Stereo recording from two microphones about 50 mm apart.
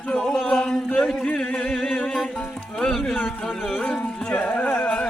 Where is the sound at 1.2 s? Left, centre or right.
Left.